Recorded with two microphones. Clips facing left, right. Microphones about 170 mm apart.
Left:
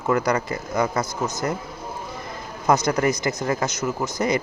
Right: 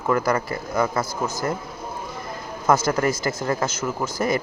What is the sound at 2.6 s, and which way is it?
Speech, 20° left (ahead or behind).